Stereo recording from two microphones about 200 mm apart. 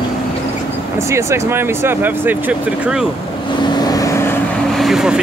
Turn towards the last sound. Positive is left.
turn(degrees=0)  # may be behind; listen again after turning